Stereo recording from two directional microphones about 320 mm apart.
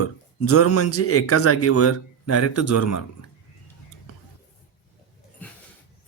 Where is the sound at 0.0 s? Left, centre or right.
Left.